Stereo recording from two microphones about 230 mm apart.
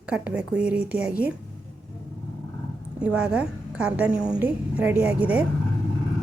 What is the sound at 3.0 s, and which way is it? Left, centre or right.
A woman's voice, centre.